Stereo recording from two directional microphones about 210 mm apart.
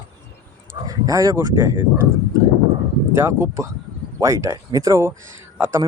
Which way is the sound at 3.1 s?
10° right (ahead or behind).